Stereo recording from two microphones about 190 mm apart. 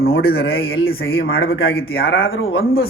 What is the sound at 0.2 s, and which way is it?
Speech, 55° left (ahead or behind).